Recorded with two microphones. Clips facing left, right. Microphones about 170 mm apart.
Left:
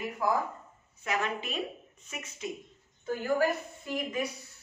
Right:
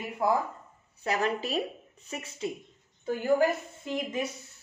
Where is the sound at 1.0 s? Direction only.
35° right (ahead or behind).